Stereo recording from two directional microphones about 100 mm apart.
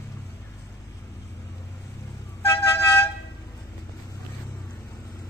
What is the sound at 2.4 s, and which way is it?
Music, 30° left (ahead or behind).